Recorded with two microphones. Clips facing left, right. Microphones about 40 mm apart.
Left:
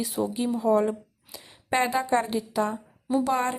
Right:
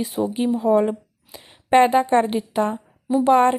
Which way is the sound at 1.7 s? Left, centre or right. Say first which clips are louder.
Right 9 dB; right.